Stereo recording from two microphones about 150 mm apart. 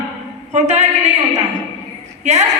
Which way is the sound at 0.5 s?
50° right (ahead or behind).